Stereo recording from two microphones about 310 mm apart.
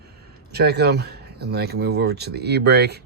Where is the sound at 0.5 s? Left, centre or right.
Right.